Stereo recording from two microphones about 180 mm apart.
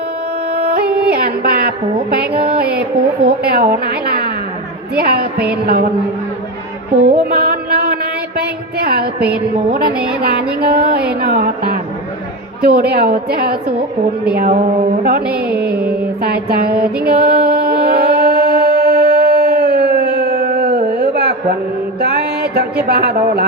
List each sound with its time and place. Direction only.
0.5 s music: 60° right (ahead or behind)
7.0 s music: 60° right (ahead or behind)
9.9 s a woman's voice: 5° right (ahead or behind)
10.2 s music: 60° right (ahead or behind)
15.0 s music: 55° right (ahead or behind)
15.4 s music: 5° right (ahead or behind)
16.2 s music: 60° right (ahead or behind)
16.7 s music: 5° right (ahead or behind)
17.1 s music: 60° right (ahead or behind)
22.9 s music: 65° right (ahead or behind)